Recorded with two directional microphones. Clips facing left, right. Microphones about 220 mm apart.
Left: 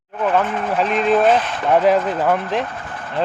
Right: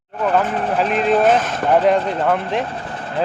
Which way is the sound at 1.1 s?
Centre (ahead or behind).